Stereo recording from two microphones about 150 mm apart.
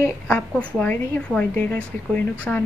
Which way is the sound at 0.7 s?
5° left (ahead or behind).